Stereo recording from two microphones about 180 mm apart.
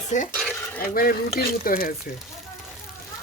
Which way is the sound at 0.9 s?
55° left (ahead or behind).